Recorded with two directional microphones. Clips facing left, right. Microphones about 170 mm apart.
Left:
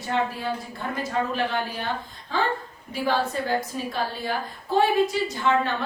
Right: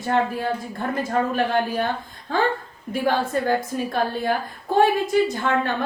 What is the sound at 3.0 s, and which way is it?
A woman's voice, 50° right (ahead or behind).